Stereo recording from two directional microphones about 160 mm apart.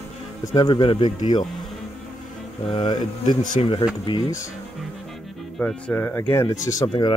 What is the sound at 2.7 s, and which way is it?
Speech, 30° left (ahead or behind).